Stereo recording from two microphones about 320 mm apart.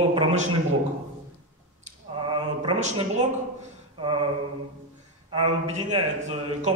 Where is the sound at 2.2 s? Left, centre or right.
Centre.